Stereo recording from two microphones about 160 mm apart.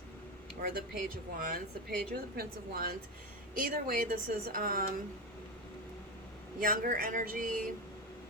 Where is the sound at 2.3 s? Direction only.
70° right (ahead or behind).